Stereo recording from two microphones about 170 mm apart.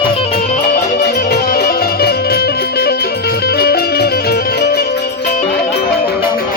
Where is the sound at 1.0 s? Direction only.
75° left (ahead or behind).